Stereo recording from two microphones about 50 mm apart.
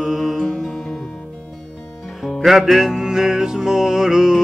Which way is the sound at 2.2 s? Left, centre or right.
Centre.